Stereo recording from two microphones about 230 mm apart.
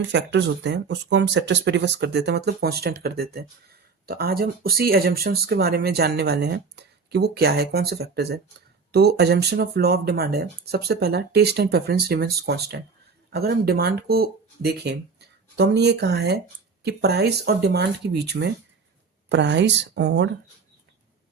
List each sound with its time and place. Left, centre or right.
0.1 s speech: right